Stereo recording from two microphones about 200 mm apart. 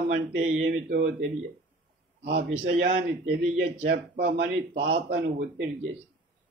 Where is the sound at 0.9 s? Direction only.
65° right (ahead or behind).